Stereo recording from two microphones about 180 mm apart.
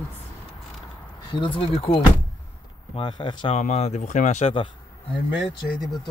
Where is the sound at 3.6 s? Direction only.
40° left (ahead or behind).